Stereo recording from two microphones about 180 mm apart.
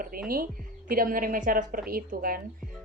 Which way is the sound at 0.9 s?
50° right (ahead or behind).